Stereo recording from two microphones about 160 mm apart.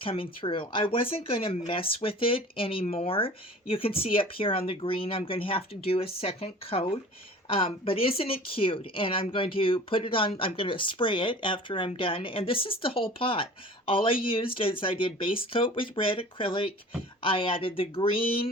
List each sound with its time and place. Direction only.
0.0 s speech: 35° left (ahead or behind)